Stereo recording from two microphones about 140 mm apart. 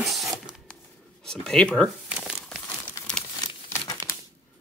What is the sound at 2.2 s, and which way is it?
Crumpling, centre (ahead or behind).